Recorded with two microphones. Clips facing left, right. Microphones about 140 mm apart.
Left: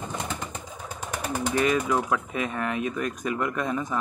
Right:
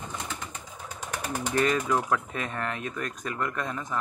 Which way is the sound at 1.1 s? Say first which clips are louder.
Left 2 dB; 10° left (ahead or behind).